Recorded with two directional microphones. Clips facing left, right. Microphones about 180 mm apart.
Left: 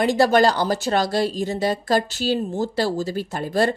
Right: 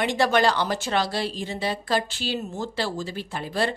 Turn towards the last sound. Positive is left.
turn(degrees=45)  # may be behind; listen again after turning